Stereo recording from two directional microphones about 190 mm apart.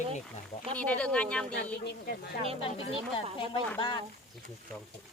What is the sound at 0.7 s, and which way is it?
Speech, 5° left (ahead or behind).